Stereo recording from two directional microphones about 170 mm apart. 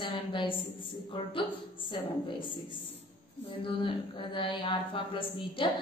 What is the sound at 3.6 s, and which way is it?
A woman's voice, 30° left (ahead or behind).